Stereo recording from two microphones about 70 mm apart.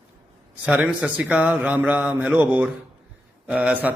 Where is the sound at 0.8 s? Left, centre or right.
Centre.